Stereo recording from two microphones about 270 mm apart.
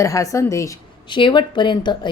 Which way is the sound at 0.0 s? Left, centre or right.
Centre.